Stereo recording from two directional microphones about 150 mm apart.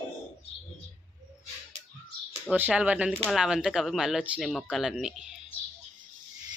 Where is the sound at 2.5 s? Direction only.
10° right (ahead or behind).